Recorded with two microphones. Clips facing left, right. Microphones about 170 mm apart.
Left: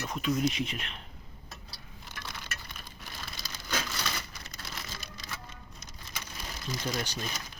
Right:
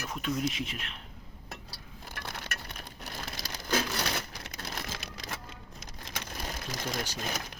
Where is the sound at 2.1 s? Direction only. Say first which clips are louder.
Right 3 dB; 60° right (ahead or behind); by 4.0 s 80° right.